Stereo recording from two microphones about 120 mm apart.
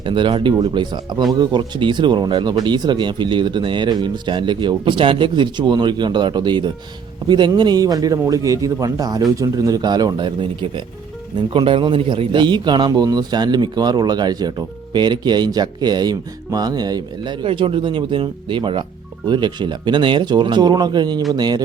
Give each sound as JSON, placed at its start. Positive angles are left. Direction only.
{"t": 0.0, "sound": "speech", "side_deg": -45}
{"t": 17.4, "sound": "speech", "side_deg": -45}